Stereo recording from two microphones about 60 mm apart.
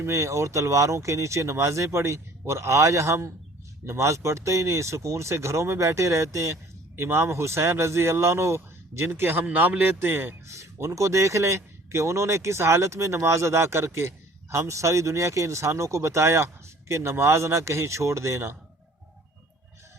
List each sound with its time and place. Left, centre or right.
0.0 s speech: right
9.0 s speech: right
10.4 s speech: right